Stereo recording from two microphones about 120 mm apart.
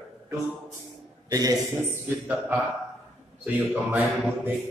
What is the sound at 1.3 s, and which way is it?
Speech, 30° right (ahead or behind).